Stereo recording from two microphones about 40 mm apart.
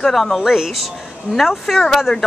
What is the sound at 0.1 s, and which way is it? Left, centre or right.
Speech, centre.